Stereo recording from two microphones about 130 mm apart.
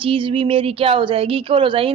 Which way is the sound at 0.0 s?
45° right (ahead or behind).